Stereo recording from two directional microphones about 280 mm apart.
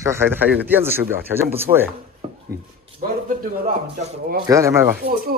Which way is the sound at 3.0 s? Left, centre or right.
Right.